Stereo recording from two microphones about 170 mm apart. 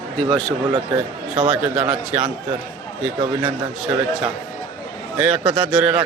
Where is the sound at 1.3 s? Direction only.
5° right (ahead or behind).